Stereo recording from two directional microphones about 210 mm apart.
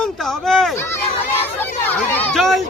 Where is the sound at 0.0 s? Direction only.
Centre (ahead or behind).